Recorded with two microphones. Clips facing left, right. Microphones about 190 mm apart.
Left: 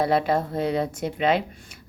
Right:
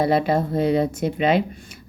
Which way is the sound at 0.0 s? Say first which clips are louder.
Right 3 dB; 5° right (ahead or behind).